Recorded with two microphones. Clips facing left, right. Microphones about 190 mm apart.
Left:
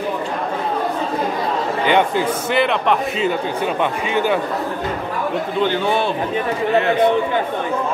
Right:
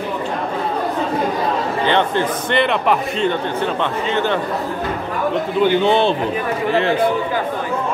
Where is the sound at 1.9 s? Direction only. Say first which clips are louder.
Left 2 dB; 10° left (ahead or behind).